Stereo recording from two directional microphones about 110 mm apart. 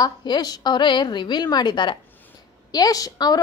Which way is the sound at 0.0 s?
40° left (ahead or behind).